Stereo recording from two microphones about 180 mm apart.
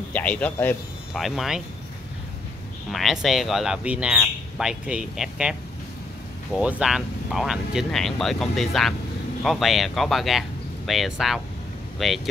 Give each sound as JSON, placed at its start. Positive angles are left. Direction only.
{"t": 0.1, "sound": "speech", "side_deg": 5}
{"t": 2.9, "sound": "speech", "side_deg": 0}